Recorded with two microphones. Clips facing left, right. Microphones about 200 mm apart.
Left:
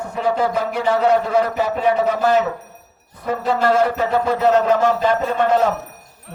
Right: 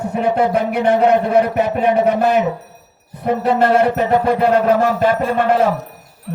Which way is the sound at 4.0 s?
15° right (ahead or behind).